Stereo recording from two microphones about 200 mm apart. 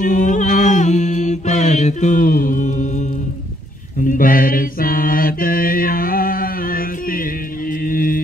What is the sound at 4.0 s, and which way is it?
Mantra, 45° left (ahead or behind).